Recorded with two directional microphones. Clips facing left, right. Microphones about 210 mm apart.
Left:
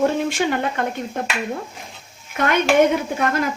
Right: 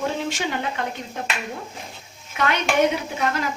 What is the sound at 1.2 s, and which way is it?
Speech, 50° left (ahead or behind).